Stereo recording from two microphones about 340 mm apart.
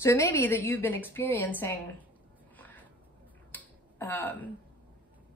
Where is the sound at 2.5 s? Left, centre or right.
Centre.